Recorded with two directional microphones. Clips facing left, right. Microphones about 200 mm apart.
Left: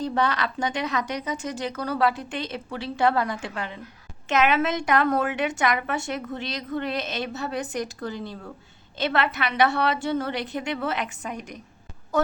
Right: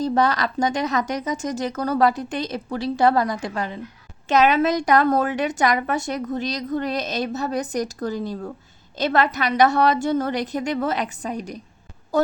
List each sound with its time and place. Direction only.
0.0 s a woman's voice: 40° right (ahead or behind)